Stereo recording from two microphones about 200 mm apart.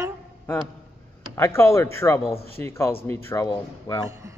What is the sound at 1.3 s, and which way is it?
A man's voice, 15° left (ahead or behind).